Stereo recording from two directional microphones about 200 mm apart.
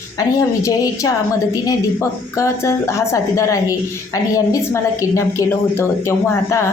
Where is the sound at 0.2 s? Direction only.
15° left (ahead or behind).